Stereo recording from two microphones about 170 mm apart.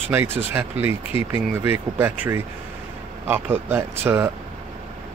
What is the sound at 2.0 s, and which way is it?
Speech, 15° right (ahead or behind).